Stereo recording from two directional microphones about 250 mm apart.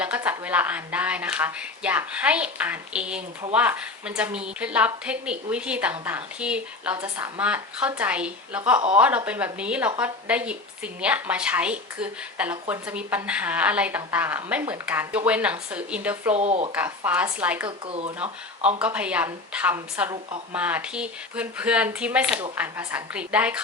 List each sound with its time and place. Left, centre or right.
0.0 s a woman's voice: centre
16.3 s speech: right
16.7 s a woman's voice: centre
17.7 s speech: right
18.8 s a woman's voice: centre